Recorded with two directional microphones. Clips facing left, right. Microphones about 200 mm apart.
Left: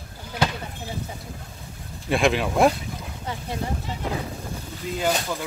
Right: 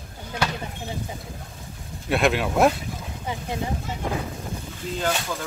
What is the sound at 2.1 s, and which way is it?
Speech, centre (ahead or behind).